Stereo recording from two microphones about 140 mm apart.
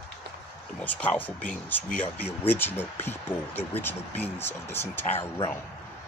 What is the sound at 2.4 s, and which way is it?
Speech, 15° left (ahead or behind).